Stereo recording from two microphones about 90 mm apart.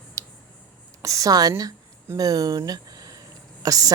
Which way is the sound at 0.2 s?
35° right (ahead or behind).